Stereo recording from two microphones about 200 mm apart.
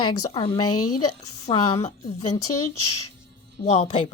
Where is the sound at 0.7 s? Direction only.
90° left.